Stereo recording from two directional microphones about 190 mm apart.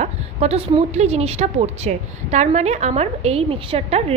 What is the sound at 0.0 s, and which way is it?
A woman's voice, 35° right (ahead or behind).